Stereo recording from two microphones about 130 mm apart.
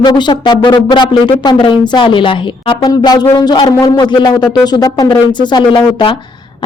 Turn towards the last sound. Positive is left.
turn(degrees=35)  # may be behind; listen again after turning